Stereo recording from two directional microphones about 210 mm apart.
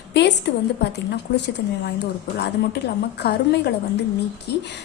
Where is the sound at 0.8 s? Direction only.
55° left (ahead or behind).